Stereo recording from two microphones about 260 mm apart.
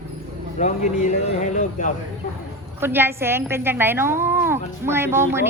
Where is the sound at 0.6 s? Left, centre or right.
Left.